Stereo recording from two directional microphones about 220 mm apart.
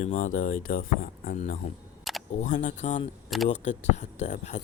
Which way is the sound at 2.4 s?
35° left (ahead or behind).